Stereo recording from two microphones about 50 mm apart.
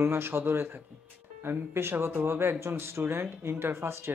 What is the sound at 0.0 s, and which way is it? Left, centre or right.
Speech, right.